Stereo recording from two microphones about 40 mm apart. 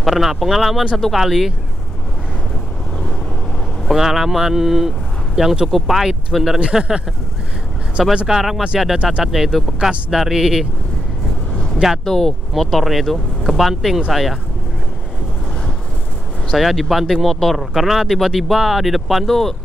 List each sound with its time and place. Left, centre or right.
0.0 s speech: centre
3.8 s speech: centre
5.7 s speech: centre
6.6 s speech: right
8.3 s speech: centre
8.9 s speech: right
9.2 s speech: centre
12.0 s speech: centre
12.5 s speech: centre
16.4 s speech: centre